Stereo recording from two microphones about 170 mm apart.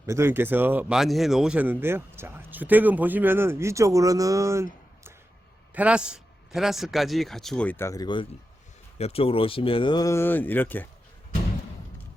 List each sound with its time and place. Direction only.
0.0 s a man's voice: 15° right (ahead or behind); by 10.8 s 10° left (ahead or behind)